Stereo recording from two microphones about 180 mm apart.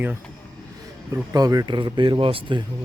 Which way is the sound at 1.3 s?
20° right (ahead or behind).